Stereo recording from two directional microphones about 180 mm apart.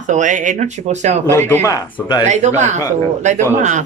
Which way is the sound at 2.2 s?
40° right (ahead or behind).